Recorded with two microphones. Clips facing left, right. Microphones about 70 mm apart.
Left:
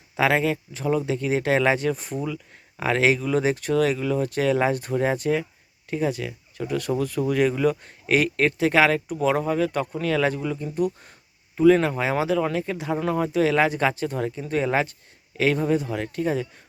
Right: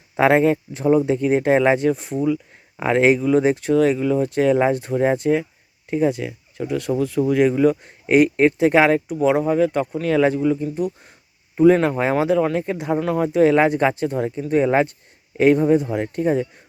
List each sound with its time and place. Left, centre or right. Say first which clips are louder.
0.2 s speech: right 6 dB; right; by 2.2 s centre
2.2 s speech: right 9 dB; centre
9.0 s speech: right 5 dB; centre
11.5 s speech: right 3 dB; right
13.0 s speech: right 2 dB; centre
13.4 s speech: right 6 dB; right
14.0 s speech: right 5 dB; centre